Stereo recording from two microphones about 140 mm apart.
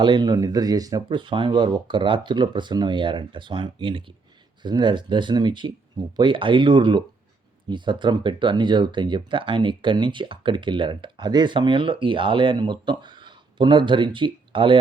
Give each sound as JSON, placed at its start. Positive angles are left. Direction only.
{"t": 0.0, "sound": "speech", "side_deg": -35}